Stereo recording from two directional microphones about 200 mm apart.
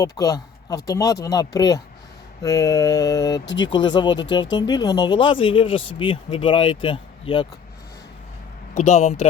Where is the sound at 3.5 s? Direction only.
20° left (ahead or behind).